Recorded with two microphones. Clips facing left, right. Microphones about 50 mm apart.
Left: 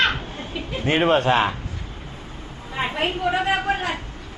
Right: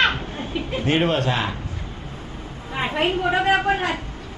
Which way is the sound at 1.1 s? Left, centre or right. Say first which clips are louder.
Left 4 dB; left.